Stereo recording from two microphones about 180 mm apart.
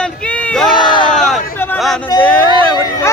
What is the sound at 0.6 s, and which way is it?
Crowd, 25° left (ahead or behind).